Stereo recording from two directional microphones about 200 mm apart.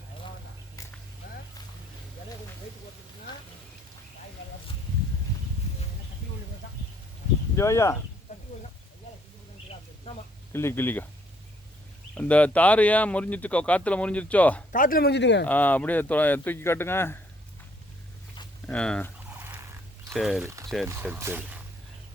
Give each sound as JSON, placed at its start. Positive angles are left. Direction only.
{"t": 0.8, "sound": "a sound", "side_deg": 15}
{"t": 1.2, "sound": "a sound", "side_deg": 45}
{"t": 7.5, "sound": "speech", "side_deg": 15}
{"t": 10.5, "sound": "speech", "side_deg": 10}
{"t": 12.1, "sound": "speech", "side_deg": 5}
{"t": 14.7, "sound": "speech", "side_deg": 45}
{"t": 15.4, "sound": "speech", "side_deg": 10}
{"t": 18.6, "sound": "speech", "side_deg": 5}
{"t": 19.4, "sound": "turkey", "side_deg": -10}
{"t": 20.1, "sound": "speech", "side_deg": 0}
{"t": 20.4, "sound": "speech", "side_deg": -15}